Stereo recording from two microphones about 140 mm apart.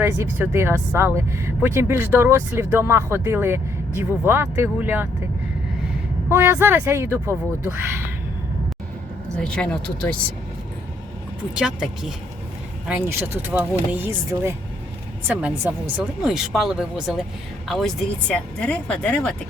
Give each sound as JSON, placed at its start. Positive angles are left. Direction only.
{"t": 0.0, "sound": "speech", "side_deg": -20}
{"t": 6.2, "sound": "speech", "side_deg": -15}
{"t": 9.4, "sound": "speech", "side_deg": 5}
{"t": 11.5, "sound": "speech", "side_deg": -5}
{"t": 12.9, "sound": "speech", "side_deg": -15}